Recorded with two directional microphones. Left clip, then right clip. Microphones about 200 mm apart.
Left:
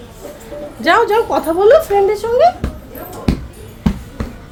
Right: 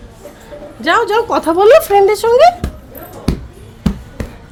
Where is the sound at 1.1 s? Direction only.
30° right (ahead or behind).